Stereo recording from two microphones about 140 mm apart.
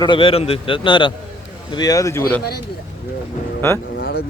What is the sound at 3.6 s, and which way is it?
Speech, 20° left (ahead or behind).